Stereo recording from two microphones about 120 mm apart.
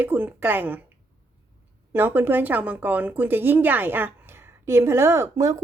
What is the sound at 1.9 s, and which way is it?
A woman's voice, 15° right (ahead or behind).